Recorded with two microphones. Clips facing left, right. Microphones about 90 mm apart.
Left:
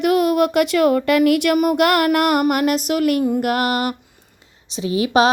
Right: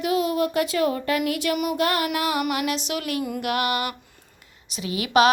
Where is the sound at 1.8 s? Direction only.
70° left (ahead or behind); by 3.9 s 45° left (ahead or behind).